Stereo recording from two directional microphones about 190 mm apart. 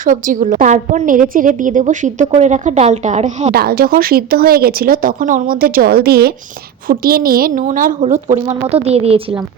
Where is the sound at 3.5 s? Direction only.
55° right (ahead or behind).